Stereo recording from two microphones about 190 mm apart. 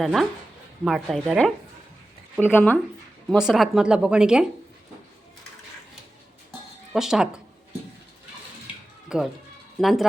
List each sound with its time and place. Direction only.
0.0 s a woman's voice: centre (ahead or behind)
3.2 s a woman's voice: centre (ahead or behind)
6.9 s a woman's voice: 5° right (ahead or behind)
9.0 s a woman's voice: 5° right (ahead or behind)